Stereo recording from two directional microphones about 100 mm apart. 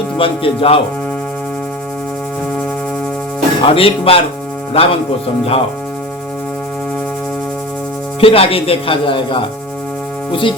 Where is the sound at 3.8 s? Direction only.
70° left (ahead or behind).